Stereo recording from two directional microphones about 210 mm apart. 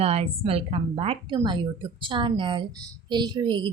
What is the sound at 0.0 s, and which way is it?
A woman's voice, 30° right (ahead or behind).